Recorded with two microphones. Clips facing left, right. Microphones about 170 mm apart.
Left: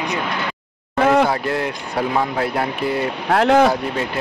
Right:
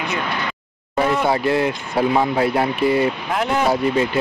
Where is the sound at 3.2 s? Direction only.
80° left.